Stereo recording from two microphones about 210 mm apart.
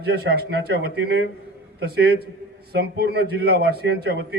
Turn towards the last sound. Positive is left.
turn(degrees=-50)  # may be behind; listen again after turning